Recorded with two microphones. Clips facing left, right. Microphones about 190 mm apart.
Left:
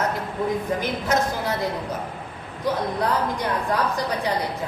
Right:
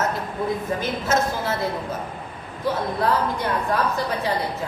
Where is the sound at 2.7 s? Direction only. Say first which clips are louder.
Right 1 dB; 20° left (ahead or behind).